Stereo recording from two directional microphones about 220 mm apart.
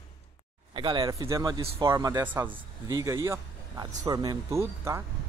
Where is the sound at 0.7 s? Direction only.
20° right (ahead or behind).